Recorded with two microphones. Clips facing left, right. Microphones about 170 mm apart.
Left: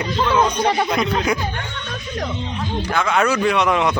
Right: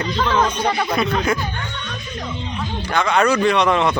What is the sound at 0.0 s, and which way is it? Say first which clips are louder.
Speech: left 1 dB; 10° left (ahead or behind).